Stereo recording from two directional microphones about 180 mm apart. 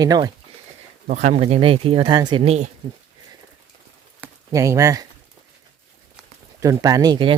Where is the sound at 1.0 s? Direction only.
45° right (ahead or behind).